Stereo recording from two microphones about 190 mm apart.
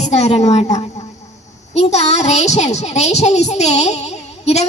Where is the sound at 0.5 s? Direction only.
35° left (ahead or behind).